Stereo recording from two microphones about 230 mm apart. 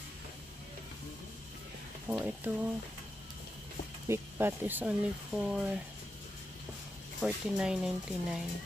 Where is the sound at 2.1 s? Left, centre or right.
Centre.